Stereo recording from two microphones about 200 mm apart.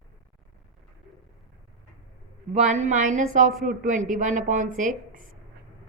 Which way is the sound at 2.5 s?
35° right (ahead or behind).